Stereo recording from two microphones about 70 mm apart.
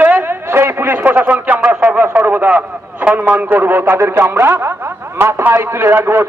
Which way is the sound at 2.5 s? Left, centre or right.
Centre.